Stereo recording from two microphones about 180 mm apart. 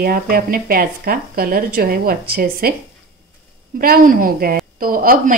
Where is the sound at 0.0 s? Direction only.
55° right (ahead or behind).